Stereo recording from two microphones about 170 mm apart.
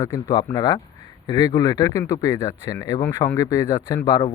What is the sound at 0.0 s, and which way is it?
Speech, 15° left (ahead or behind).